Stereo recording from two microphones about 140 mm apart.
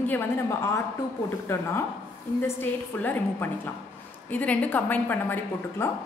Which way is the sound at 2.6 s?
15° left (ahead or behind).